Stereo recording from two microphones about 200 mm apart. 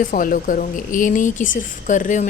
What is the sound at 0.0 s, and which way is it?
Speech, 45° left (ahead or behind).